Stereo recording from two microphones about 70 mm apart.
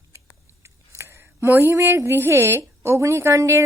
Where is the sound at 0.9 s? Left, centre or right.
Right.